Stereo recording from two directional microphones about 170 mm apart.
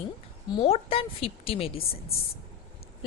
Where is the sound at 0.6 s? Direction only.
35° left (ahead or behind).